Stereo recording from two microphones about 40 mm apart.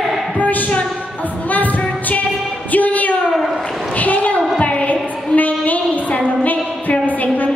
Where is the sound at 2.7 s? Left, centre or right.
Left.